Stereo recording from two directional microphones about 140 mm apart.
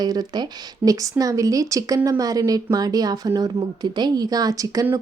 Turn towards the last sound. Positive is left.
turn(degrees=-25)  # may be behind; listen again after turning